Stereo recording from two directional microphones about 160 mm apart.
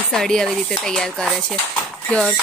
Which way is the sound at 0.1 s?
5° left (ahead or behind).